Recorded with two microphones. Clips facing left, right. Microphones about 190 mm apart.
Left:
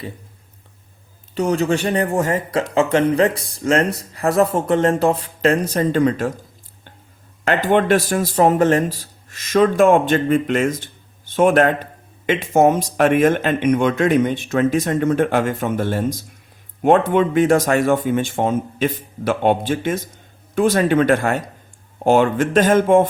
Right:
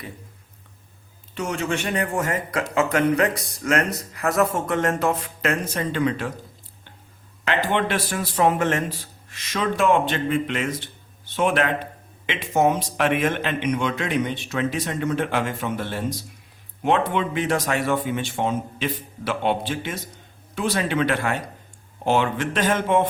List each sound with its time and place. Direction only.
1.4 s speech: 35° left (ahead or behind)
7.4 s speech: 45° left (ahead or behind)